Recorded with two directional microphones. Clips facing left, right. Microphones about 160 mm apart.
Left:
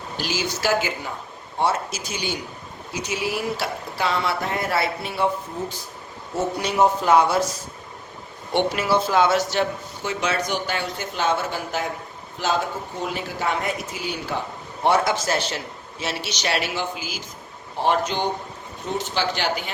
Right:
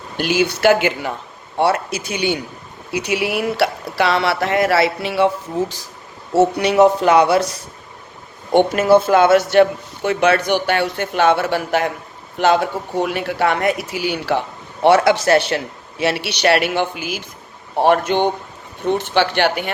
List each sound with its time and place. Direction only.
0.2 s speech: 60° right (ahead or behind); by 5.8 s 90° right
6.3 s speech: 70° right (ahead or behind)
8.5 s speech: 50° right (ahead or behind)